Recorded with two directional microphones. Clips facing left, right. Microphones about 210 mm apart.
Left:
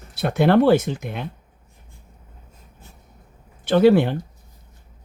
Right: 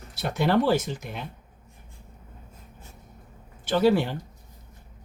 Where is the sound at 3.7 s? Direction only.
60° left (ahead or behind).